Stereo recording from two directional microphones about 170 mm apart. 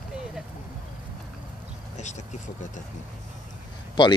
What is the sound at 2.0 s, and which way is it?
Speech, 45° left (ahead or behind).